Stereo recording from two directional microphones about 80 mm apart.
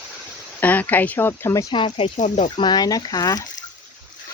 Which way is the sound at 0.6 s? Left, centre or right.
Left.